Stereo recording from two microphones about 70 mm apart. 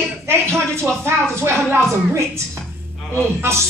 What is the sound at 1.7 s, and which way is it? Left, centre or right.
Speech, right.